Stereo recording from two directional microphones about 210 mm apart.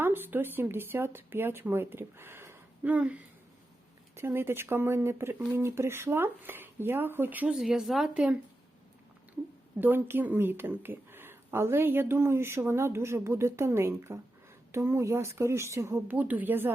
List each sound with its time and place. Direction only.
0.0 s speech: 10° right (ahead or behind)
9.8 s speech: 10° right (ahead or behind)